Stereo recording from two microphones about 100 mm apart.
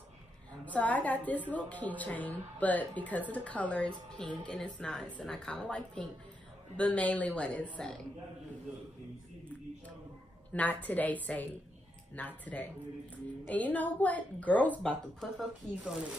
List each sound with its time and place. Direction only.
0.7 s speech: 15° left (ahead or behind)
10.5 s speech: 15° left (ahead or behind)